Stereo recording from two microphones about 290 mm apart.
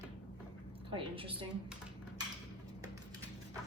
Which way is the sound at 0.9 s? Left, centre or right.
Centre.